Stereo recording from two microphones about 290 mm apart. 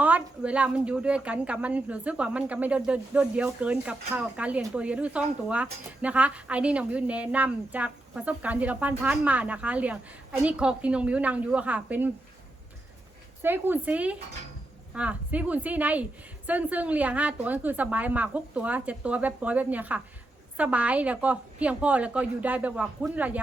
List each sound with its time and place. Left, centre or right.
0.0 s speech: centre
13.4 s speech: centre